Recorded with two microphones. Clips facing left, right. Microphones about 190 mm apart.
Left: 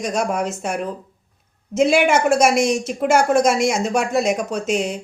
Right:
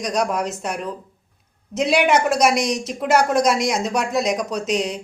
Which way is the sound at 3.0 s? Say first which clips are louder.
Left 1 dB; 50° left (ahead or behind).